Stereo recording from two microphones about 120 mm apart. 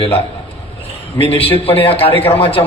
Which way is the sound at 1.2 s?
55° left (ahead or behind).